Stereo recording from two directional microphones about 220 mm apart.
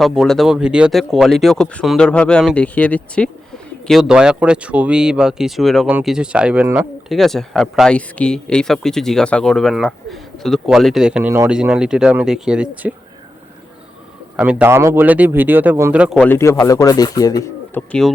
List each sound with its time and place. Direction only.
0.0 s speech: centre (ahead or behind)
14.3 s a man's voice: 10° right (ahead or behind)
16.2 s a man's voice: 10° left (ahead or behind)